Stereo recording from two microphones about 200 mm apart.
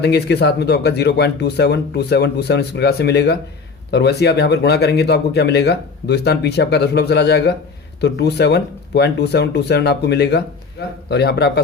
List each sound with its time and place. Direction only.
0.0 s speech: 55° left (ahead or behind)